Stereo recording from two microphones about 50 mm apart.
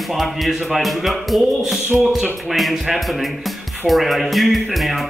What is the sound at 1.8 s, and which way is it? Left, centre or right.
Speech, right.